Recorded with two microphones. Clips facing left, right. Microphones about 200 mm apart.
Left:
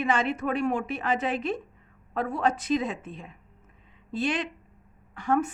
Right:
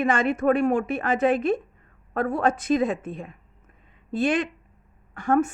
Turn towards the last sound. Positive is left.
turn(degrees=-50)  # may be behind; listen again after turning